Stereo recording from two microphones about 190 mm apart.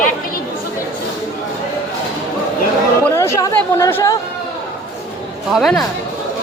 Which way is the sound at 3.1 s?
15° left (ahead or behind).